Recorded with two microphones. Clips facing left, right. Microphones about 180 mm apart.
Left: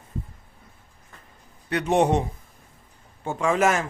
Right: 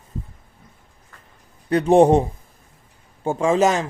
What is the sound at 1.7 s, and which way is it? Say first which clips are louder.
Speech: right 7 dB; 30° right (ahead or behind).